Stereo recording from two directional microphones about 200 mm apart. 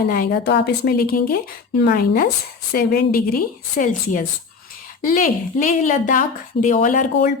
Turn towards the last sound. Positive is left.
turn(degrees=40)  # may be behind; listen again after turning